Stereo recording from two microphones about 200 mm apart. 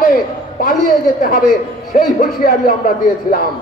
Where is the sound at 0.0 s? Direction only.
45° left (ahead or behind).